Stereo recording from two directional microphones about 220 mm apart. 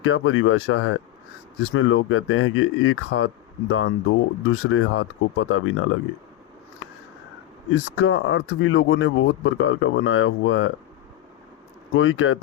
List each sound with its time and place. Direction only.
0.0 s speech: 65° left (ahead or behind)
7.7 s speech: 70° left (ahead or behind)
11.9 s speech: 65° left (ahead or behind)